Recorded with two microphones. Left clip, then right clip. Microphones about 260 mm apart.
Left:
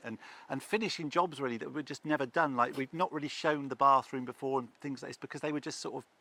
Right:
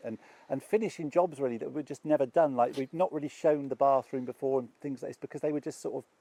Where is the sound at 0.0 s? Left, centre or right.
Left.